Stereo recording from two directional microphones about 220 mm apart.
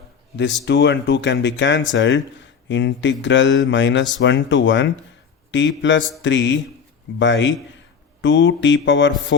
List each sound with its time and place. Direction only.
0.3 s speech: 55° left (ahead or behind)